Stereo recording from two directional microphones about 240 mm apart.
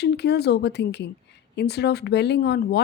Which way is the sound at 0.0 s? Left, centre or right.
Left.